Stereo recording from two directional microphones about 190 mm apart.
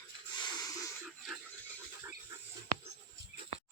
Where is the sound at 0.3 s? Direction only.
20° left (ahead or behind).